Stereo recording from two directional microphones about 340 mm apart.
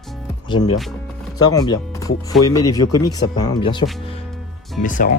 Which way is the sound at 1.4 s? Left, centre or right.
Centre.